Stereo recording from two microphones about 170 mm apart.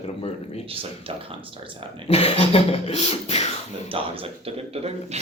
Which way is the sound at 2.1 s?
35° left (ahead or behind).